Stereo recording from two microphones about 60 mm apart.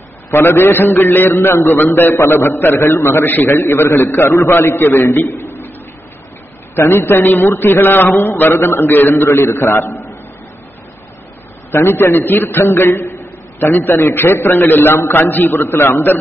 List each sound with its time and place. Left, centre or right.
0.3 s a man's voice: left
1.8 s a man's voice: left
5.2 s a man's voice: left
6.7 s a man's voice: left
11.7 s a man's voice: left